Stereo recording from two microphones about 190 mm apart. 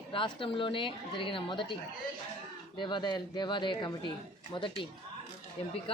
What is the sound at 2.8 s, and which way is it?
A woman's voice, 25° left (ahead or behind).